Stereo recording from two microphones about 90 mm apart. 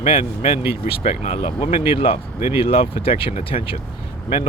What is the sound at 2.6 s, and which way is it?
Speech, 90° left.